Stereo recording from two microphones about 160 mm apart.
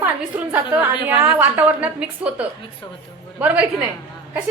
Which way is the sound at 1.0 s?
10° right (ahead or behind).